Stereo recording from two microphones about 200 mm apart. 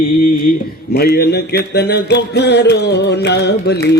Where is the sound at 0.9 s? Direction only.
50° left (ahead or behind).